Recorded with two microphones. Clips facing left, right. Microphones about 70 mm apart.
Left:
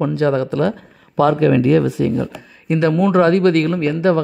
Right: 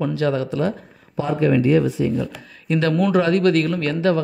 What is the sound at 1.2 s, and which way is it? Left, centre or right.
Speech, left.